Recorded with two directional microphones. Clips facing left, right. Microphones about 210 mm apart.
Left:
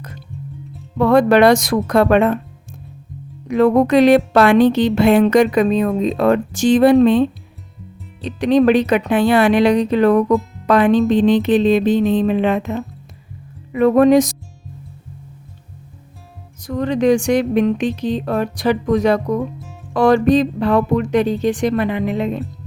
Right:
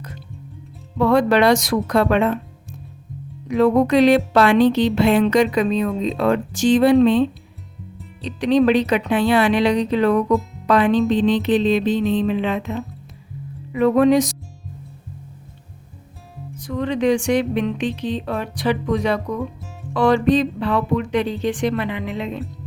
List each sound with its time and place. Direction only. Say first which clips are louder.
0.9 s a woman's voice: left 4 dB; 50° left (ahead or behind)
3.5 s a woman's voice: left 3 dB; 50° left (ahead or behind)
16.6 s a woman's voice: left 3 dB; 40° left (ahead or behind)